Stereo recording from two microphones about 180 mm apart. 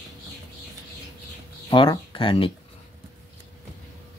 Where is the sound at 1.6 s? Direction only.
25° left (ahead or behind).